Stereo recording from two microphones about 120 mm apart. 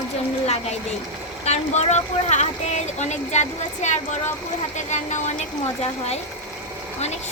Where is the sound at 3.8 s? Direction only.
85° left.